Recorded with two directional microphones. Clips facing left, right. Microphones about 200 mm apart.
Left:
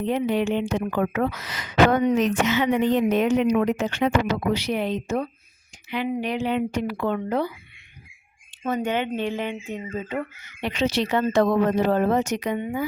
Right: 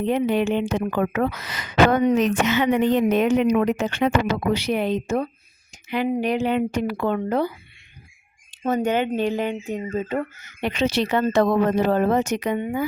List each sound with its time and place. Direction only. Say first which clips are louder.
0.0 s a woman's voice: right 2 dB; 60° right (ahead or behind)
8.6 s speech: right 3 dB; 40° right (ahead or behind)